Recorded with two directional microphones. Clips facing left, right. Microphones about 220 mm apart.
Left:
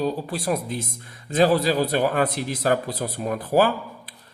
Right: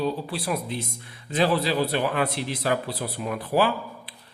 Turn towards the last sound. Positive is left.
turn(degrees=45)  # may be behind; listen again after turning